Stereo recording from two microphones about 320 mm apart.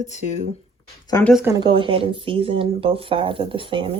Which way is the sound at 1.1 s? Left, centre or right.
Centre.